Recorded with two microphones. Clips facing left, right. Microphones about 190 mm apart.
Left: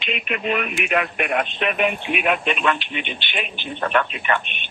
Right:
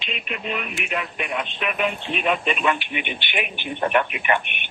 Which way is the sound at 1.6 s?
25° left (ahead or behind).